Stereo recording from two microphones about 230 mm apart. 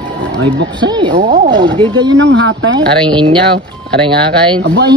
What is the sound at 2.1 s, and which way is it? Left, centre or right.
Speech, right.